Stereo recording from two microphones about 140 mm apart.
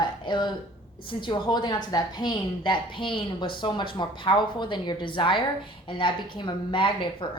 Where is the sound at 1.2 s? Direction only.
35° left (ahead or behind).